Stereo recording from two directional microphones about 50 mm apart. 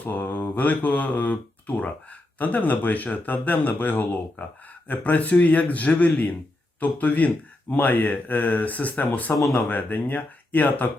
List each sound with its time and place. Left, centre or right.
0.0 s speech: left